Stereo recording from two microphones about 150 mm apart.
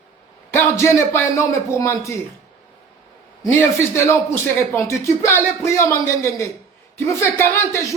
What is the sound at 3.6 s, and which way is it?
Speech, 15° left (ahead or behind).